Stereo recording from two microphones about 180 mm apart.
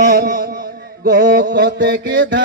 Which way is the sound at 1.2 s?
75° right (ahead or behind).